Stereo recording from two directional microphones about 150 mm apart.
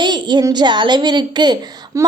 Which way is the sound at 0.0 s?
30° right (ahead or behind).